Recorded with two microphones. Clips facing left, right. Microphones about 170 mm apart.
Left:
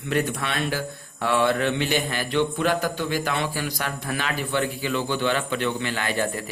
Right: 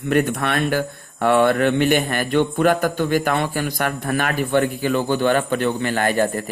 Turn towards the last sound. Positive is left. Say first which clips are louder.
# right 7 dB
turn(degrees=-50)  # may be behind; listen again after turning